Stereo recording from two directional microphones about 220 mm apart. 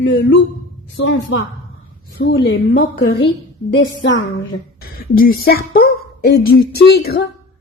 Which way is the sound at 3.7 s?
60° left (ahead or behind).